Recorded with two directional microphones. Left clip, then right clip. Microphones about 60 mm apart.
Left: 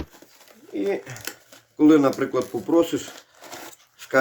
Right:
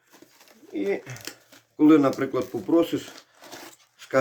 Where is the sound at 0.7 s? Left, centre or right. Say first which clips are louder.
Left 2 dB; right.